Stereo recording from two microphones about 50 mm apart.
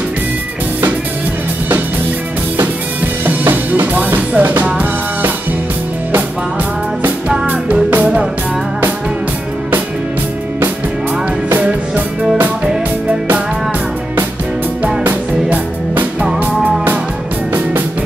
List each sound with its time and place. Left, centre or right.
3.3 s music: right
15.5 s music: right